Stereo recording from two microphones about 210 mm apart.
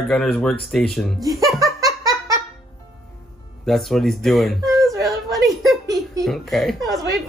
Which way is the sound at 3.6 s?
Centre (ahead or behind).